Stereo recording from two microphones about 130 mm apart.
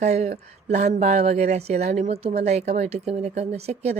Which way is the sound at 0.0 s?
60° right (ahead or behind).